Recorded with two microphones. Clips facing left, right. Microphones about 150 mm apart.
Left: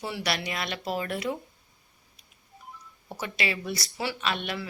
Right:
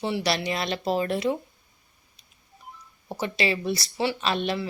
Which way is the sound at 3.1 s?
30° right (ahead or behind).